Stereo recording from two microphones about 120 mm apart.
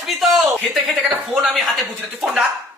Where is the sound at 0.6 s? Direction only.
Centre (ahead or behind).